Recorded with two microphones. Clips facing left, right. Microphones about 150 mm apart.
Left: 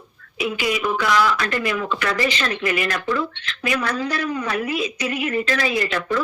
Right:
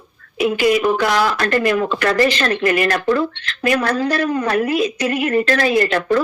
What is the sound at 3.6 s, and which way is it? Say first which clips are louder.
A woman's voice: right 6 dB; 55° right (ahead or behind).